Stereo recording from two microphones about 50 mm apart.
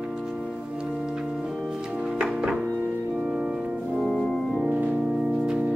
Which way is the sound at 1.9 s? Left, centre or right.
Centre.